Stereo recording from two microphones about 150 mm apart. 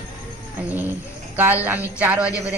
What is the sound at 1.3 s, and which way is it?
Speech, 10° right (ahead or behind).